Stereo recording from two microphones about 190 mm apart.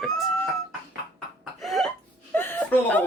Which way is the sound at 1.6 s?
Centre (ahead or behind).